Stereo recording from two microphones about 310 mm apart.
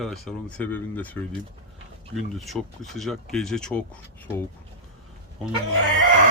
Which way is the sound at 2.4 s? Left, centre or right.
Centre.